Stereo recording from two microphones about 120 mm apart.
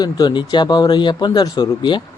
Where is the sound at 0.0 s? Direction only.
35° left (ahead or behind).